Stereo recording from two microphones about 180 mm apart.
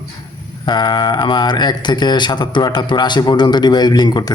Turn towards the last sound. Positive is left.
turn(degrees=25)  # may be behind; listen again after turning